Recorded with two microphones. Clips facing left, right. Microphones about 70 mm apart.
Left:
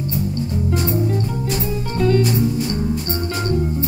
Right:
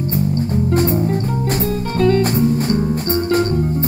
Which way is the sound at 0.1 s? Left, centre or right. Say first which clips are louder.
Right 5 dB; right.